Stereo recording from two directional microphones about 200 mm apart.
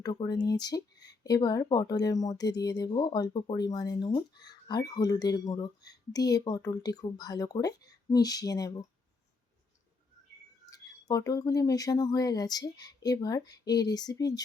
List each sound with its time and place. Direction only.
0.0 s speech: 20° left (ahead or behind)
10.7 s speech: 15° left (ahead or behind)